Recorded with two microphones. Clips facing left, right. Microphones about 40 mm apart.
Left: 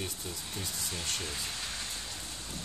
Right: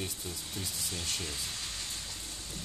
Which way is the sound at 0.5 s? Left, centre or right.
Centre.